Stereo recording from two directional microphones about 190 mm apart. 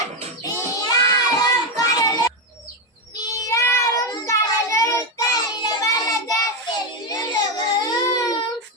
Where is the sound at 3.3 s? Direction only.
15° left (ahead or behind).